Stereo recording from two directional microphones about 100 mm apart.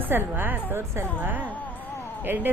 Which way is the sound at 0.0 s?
20° right (ahead or behind).